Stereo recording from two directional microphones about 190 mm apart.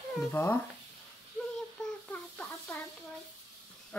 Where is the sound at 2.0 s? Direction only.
10° left (ahead or behind).